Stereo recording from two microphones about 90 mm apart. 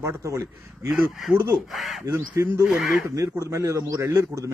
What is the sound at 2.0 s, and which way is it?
A man's voice, 35° right (ahead or behind).